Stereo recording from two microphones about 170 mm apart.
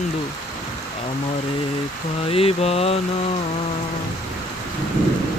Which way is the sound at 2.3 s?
35° left (ahead or behind).